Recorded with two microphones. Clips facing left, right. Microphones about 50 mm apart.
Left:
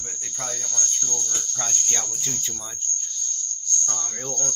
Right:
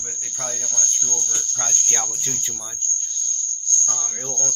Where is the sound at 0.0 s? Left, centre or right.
Centre.